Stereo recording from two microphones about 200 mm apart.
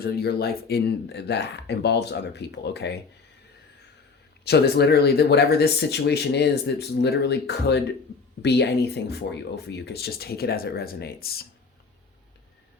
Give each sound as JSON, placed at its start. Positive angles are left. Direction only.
{"t": 0.0, "sound": "speech", "side_deg": 50}
{"t": 4.4, "sound": "speech", "side_deg": 55}